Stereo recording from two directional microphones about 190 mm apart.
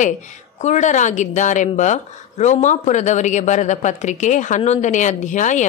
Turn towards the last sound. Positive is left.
turn(degrees=40)  # may be behind; listen again after turning